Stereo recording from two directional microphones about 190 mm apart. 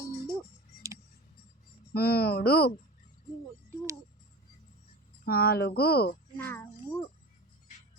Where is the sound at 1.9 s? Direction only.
55° left (ahead or behind).